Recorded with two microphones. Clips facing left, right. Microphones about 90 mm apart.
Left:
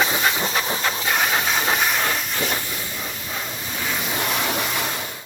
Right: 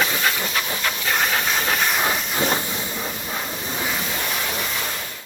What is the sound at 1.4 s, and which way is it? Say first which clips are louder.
Steam: left 1 dB; 5° left (ahead or behind).